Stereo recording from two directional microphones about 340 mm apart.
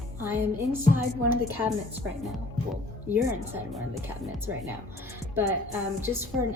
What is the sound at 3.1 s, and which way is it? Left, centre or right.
Speech, centre.